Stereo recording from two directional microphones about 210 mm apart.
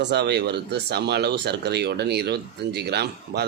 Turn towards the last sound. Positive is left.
turn(degrees=-50)  # may be behind; listen again after turning